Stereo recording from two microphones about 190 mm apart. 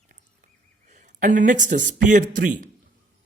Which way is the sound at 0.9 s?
40° right (ahead or behind).